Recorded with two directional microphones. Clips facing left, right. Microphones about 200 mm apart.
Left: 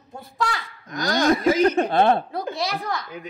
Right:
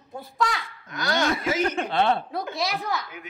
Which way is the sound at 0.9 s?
40° left (ahead or behind).